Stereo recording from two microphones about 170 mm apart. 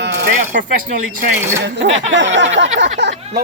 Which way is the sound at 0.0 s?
90° right.